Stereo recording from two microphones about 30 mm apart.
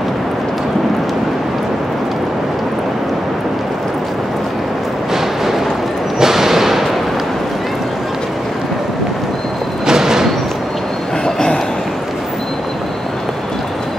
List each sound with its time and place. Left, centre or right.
6.1 s a sound: centre
9.8 s music: centre
11.2 s train: left